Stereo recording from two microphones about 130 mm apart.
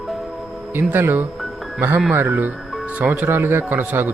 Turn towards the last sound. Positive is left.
turn(degrees=-15)  # may be behind; listen again after turning